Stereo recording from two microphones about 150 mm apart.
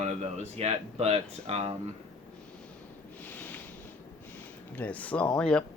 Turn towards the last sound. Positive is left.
turn(degrees=5)  # may be behind; listen again after turning